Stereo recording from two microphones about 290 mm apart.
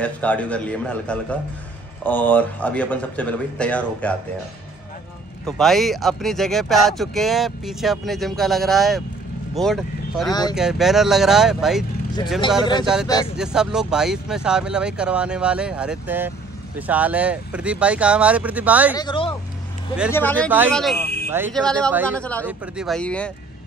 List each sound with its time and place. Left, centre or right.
0.0 s speech: centre
5.4 s speech: centre
12.8 s speech: centre
18.9 s speech: centre